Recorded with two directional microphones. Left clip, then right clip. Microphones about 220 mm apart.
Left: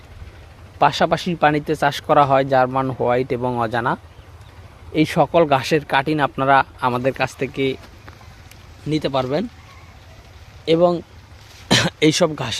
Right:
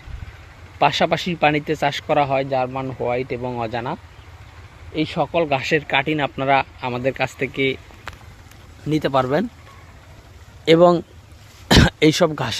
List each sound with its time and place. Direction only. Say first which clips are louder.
0.8 s speech: left 1 dB; 5° left (ahead or behind)
4.9 s speech: left 5 dB; 30° left (ahead or behind); by 7.8 s 10° left (ahead or behind)
8.9 s speech: right 2 dB; centre (ahead or behind)
10.7 s speech: right 3 dB; 25° right (ahead or behind)
11.7 s speech: right 1 dB; 5° right (ahead or behind)